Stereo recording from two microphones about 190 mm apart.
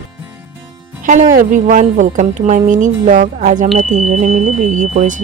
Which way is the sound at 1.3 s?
45° right (ahead or behind).